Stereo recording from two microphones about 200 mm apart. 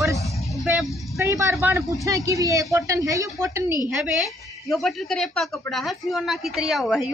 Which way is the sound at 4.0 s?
Centre (ahead or behind).